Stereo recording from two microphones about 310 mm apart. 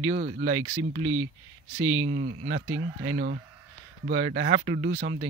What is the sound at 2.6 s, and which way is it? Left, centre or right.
Speech, right.